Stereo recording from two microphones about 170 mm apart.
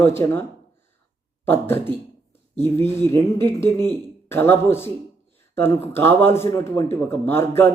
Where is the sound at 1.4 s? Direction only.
15° left (ahead or behind).